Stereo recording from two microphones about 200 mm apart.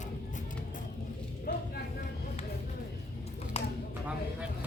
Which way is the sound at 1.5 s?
50° left (ahead or behind).